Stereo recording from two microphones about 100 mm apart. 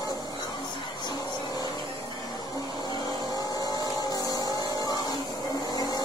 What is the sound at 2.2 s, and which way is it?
Vehicle, 40° left (ahead or behind).